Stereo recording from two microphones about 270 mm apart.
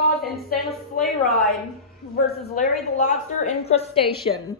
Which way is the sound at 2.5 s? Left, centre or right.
Left.